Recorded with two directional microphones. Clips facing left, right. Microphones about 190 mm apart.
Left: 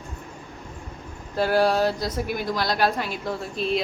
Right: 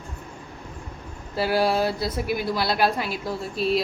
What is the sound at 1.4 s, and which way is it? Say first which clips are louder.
A woman's voice: left 1 dB; 10° right (ahead or behind).